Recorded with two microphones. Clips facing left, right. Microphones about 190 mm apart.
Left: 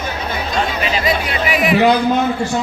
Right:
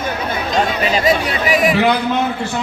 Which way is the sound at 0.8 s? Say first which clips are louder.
Right 3 dB; 40° right (ahead or behind).